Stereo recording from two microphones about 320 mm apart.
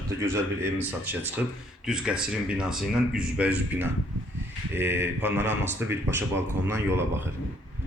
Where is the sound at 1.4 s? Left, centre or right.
Centre.